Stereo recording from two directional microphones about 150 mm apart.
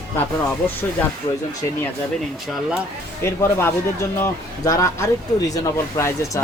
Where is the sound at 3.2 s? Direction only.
15° left (ahead or behind).